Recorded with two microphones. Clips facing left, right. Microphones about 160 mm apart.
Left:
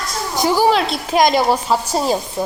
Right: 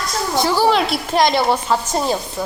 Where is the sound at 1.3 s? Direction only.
10° left (ahead or behind).